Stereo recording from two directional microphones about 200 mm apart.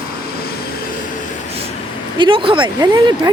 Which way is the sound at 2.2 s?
25° right (ahead or behind).